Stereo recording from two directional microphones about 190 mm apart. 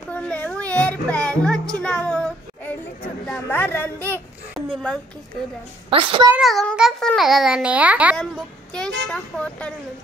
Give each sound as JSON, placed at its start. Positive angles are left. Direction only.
{"t": 0.1, "sound": "music", "side_deg": 5}
{"t": 1.8, "sound": "child singing", "side_deg": 5}
{"t": 3.3, "sound": "a sound", "side_deg": 10}
{"t": 5.9, "sound": "a child's voice", "side_deg": -25}
{"t": 6.3, "sound": "a child's voice", "side_deg": 0}
{"t": 8.7, "sound": "a child's voice", "side_deg": 5}